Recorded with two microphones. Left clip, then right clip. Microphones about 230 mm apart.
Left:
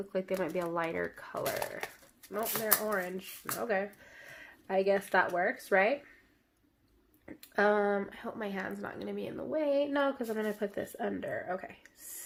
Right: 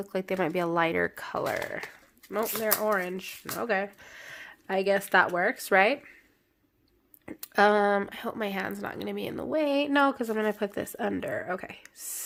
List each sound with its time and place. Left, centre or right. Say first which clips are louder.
0.1 s speech: right 5 dB; right
2.8 s speech: right 6 dB; right
7.3 s speech: right 6 dB; right